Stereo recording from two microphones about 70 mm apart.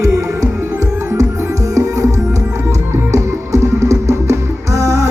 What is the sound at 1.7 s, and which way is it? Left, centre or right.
Music, right.